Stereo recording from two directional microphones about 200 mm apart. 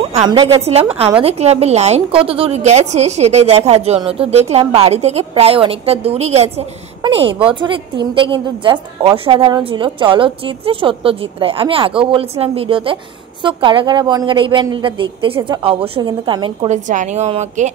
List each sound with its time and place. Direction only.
0.2 s a woman's voice: 20° right (ahead or behind)